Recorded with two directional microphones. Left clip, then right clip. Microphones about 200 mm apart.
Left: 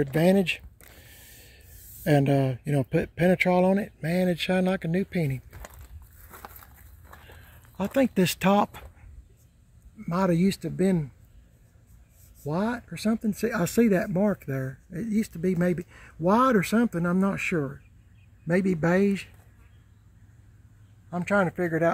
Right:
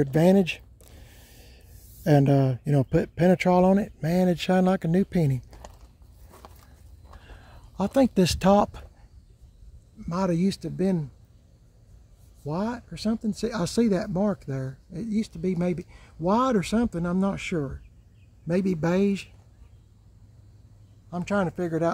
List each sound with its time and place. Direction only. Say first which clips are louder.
0.1 s speech: right 1 dB; 15° right (ahead or behind)
0.9 s a sound: left 2 dB; 10° right (ahead or behind)
2.0 s speech: right 1 dB; 10° right (ahead or behind)
7.2 s a sound: even; 10° right (ahead or behind)
8.5 s speech: right 3 dB; 5° right (ahead or behind)
9.9 s speech: left 2 dB; 15° left (ahead or behind)
12.4 s speech: left 1 dB; 10° left (ahead or behind)
21.1 s speech: left 3 dB; 10° left (ahead or behind)